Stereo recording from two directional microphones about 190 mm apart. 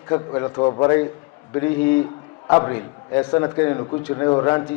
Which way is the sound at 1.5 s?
15° left (ahead or behind).